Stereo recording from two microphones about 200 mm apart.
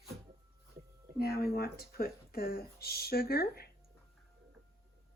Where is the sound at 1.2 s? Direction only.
50° left (ahead or behind).